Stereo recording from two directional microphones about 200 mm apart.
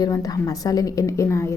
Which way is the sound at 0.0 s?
20° left (ahead or behind).